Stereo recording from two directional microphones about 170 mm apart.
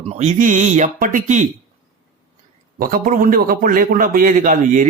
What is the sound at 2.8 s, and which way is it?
Speech, 55° right (ahead or behind).